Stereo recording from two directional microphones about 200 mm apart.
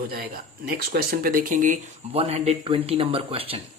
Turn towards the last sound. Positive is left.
turn(degrees=-30)  # may be behind; listen again after turning